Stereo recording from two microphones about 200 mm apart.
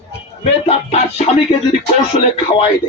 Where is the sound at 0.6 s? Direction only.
30° left (ahead or behind).